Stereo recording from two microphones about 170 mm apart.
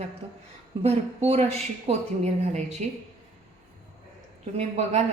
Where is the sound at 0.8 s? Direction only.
35° right (ahead or behind).